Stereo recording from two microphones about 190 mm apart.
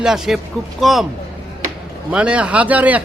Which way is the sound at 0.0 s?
Centre (ahead or behind).